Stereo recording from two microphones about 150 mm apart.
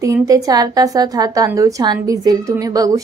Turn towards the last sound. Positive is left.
turn(degrees=-25)  # may be behind; listen again after turning